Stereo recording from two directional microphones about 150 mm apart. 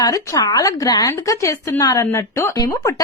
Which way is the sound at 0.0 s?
25° left (ahead or behind).